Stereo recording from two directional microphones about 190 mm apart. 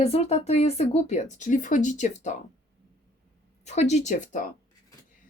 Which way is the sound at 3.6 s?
35° left (ahead or behind).